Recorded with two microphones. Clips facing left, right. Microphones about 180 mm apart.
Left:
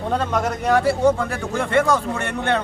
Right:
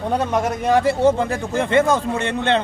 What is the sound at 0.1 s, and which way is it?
A man's voice, 10° right (ahead or behind).